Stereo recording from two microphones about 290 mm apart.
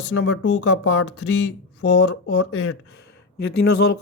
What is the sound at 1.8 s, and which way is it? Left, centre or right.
Speech, left.